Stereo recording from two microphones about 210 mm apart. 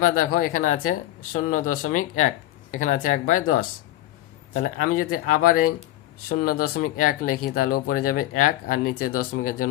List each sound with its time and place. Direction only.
0.0 s speech: 40° left (ahead or behind)
1.5 s speech: 90° left
1.7 s speech: 40° left (ahead or behind)
4.6 s speech: 40° left (ahead or behind)